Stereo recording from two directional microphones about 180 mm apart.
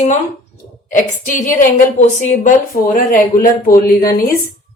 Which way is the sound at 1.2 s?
45° left (ahead or behind).